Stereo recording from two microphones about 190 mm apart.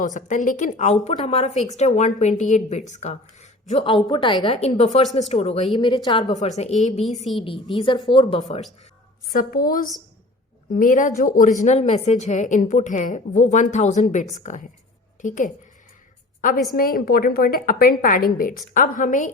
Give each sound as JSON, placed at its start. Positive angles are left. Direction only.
{"t": 0.0, "sound": "a woman's voice", "side_deg": 40}
{"t": 3.8, "sound": "a woman's voice", "side_deg": 25}
{"t": 6.6, "sound": "a woman's voice", "side_deg": 35}
{"t": 9.3, "sound": "a woman's voice", "side_deg": 50}
{"t": 16.7, "sound": "a woman's voice", "side_deg": 50}